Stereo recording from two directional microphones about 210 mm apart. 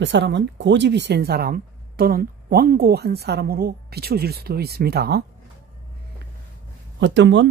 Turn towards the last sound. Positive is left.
turn(degrees=-60)  # may be behind; listen again after turning